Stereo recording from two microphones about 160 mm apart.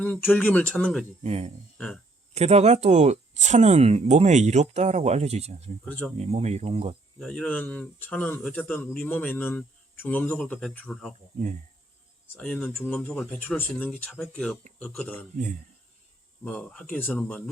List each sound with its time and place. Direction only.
0.0 s a man's voice: 10° left (ahead or behind)
1.2 s speech: 40° right (ahead or behind)
7.2 s a man's voice: 5° left (ahead or behind)
12.4 s a man's voice: 5° left (ahead or behind)
16.4 s a man's voice: 5° left (ahead or behind)